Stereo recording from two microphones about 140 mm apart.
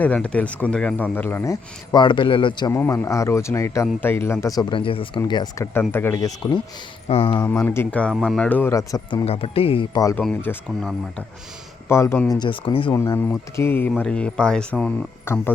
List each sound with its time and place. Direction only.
0.0 s speech: 10° left (ahead or behind); by 2.7 s 35° left (ahead or behind)
2.7 s speech: 20° left (ahead or behind)
4.7 s speech: 40° left (ahead or behind)
5.9 s speech: 15° left (ahead or behind)
6.4 s speech: 30° left (ahead or behind)
7.1 s speech: 45° left (ahead or behind)
7.4 s speech: 15° left (ahead or behind)
8.7 s speech: 20° left (ahead or behind)
9.2 s speech: 45° left (ahead or behind)
10.2 s speech: 10° left (ahead or behind)
11.9 s speech: 20° left (ahead or behind)
12.3 s speech: 35° left (ahead or behind)
13.6 s speech: 15° left (ahead or behind)
15.2 s speech: 15° left (ahead or behind)